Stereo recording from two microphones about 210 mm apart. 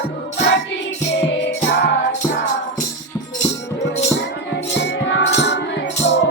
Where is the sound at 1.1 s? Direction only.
55° left (ahead or behind).